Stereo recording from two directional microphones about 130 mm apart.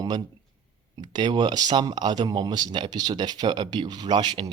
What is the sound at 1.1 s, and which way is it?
Speech, 35° right (ahead or behind).